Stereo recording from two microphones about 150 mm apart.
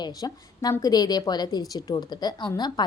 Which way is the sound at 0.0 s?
25° left (ahead or behind).